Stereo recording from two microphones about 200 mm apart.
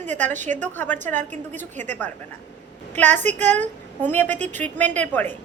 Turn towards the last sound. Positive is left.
turn(degrees=10)  # may be behind; listen again after turning